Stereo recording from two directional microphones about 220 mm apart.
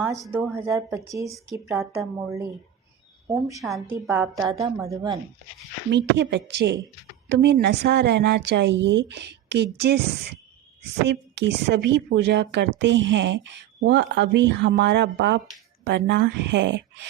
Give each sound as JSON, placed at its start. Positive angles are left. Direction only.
{"t": 0.2, "sound": "a woman's voice", "side_deg": -10}
{"t": 3.6, "sound": "a woman's voice", "side_deg": 0}
{"t": 5.9, "sound": "speech", "side_deg": -50}